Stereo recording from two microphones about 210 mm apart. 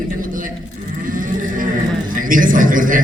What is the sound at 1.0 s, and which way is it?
Livestock, 40° right (ahead or behind).